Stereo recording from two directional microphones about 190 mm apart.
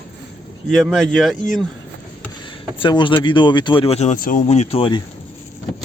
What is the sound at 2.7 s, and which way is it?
Speech, 25° left (ahead or behind).